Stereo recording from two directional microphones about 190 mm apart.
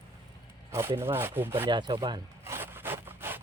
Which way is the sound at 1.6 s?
25° right (ahead or behind).